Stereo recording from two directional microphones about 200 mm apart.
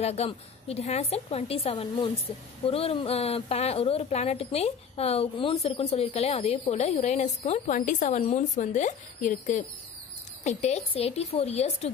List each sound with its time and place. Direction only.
0.0 s a woman's voice: 30° left (ahead or behind)